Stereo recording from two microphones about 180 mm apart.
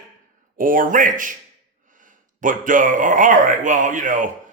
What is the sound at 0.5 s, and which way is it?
Speech, 50° right (ahead or behind).